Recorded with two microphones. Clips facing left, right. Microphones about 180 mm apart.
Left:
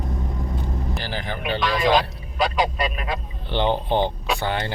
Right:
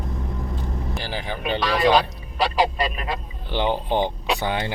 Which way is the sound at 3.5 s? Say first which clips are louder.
Left 1 dB; 10° right (ahead or behind).